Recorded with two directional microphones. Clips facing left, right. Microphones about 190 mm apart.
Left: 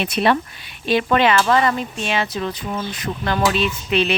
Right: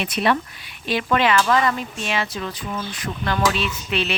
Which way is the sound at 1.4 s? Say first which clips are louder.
Left 2 dB; 40° left (ahead or behind).